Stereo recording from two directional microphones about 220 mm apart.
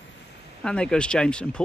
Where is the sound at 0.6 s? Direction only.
5° left (ahead or behind).